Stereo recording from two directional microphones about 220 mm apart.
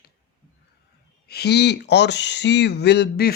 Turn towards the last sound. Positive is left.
turn(degrees=45)  # may be behind; listen again after turning